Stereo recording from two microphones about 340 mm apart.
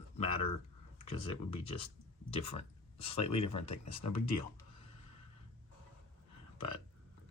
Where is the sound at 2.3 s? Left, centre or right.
Centre.